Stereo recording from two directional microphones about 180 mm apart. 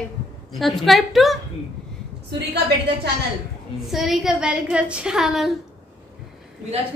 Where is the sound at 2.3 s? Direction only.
65° right (ahead or behind).